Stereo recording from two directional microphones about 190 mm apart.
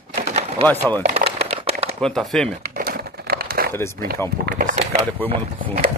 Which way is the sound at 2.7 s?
50° right (ahead or behind).